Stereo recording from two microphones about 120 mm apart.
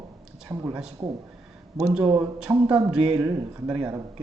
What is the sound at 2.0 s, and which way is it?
Speech, 20° right (ahead or behind).